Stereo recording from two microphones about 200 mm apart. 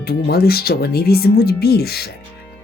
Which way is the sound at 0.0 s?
50° left (ahead or behind).